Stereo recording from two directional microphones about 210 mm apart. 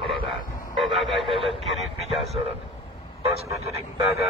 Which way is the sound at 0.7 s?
Centre (ahead or behind).